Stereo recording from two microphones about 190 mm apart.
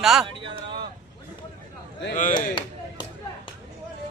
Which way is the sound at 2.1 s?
45° left (ahead or behind).